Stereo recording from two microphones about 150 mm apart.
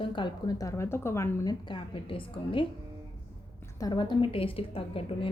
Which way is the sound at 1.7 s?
35° left (ahead or behind).